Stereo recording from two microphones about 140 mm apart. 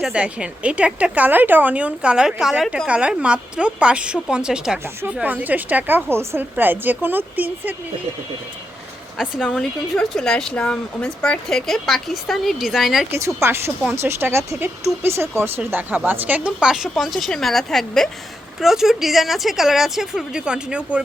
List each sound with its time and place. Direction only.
0.0 s a woman's voice: 5° right (ahead or behind)
9.1 s a woman's voice: 5° right (ahead or behind)
13.1 s a woman's voice: 20° right (ahead or behind)